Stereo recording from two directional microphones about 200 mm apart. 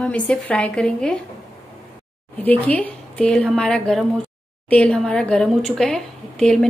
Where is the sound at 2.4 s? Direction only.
5° left (ahead or behind).